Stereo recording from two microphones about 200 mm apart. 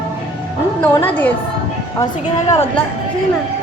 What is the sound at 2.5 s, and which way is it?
Speech, 10° left (ahead or behind).